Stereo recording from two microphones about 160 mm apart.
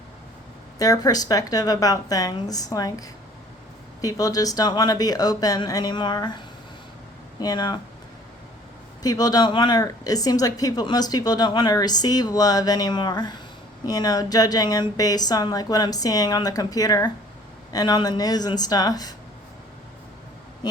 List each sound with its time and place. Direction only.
0.8 s speech: 20° left (ahead or behind)
4.0 s speech: 25° left (ahead or behind)
9.0 s speech: 25° left (ahead or behind)